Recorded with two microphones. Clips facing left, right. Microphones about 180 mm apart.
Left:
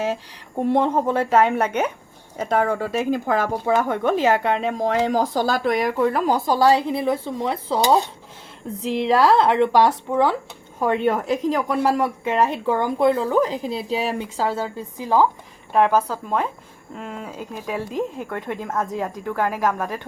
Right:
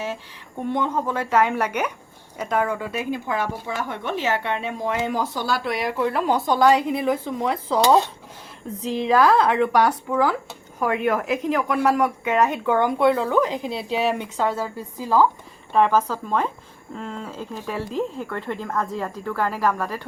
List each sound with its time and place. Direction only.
0.6 s speech: 30° left (ahead or behind)
8.8 s a woman's voice: 90° left
9.0 s speech: 30° left (ahead or behind)